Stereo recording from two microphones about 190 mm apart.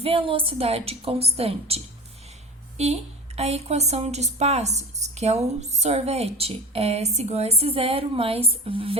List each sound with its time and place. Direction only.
0.0 s a woman's voice: 30° right (ahead or behind)